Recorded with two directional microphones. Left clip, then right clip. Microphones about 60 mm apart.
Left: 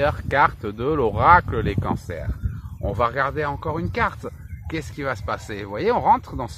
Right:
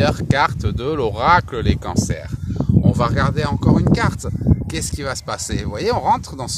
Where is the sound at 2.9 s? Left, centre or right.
Right.